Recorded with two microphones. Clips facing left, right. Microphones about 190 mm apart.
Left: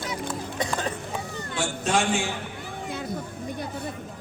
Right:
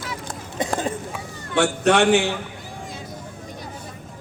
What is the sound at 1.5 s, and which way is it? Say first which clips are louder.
Speech: right 8 dB; 65° right (ahead or behind).